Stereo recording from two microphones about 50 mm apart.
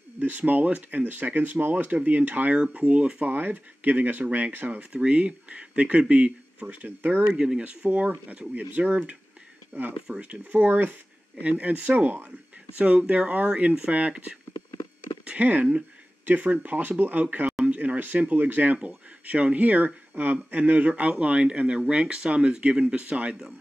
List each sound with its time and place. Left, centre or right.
0.4 s speech: right
1.9 s speech: right
3.3 s speech: right
4.9 s speech: right
6.7 s speech: right
7.3 s speech: centre
7.6 s speech: right
10.1 s speech: right
10.5 s speech: right
15.2 s speech: right
17.6 s a sound: right
18.3 s speech: right